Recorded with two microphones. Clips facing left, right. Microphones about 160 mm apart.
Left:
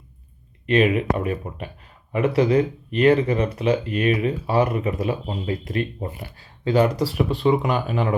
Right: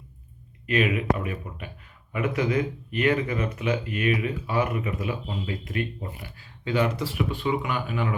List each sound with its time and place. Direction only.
0.7 s speech: 35° left (ahead or behind)